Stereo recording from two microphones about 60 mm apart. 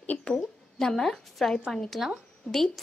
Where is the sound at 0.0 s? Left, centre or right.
Left.